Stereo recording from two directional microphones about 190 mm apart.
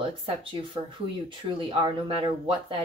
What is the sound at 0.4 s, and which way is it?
Speech, 25° right (ahead or behind).